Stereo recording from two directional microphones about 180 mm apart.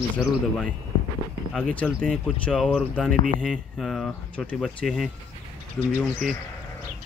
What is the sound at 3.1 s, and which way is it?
Speech, 50° right (ahead or behind).